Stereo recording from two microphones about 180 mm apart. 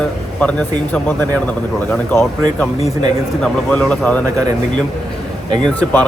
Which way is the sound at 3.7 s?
5° left (ahead or behind).